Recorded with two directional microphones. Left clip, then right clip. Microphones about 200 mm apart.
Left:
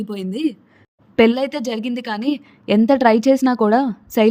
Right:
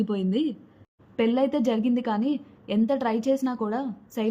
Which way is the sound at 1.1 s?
40° left (ahead or behind).